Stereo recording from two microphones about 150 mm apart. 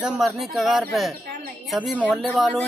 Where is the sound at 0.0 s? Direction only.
5° right (ahead or behind).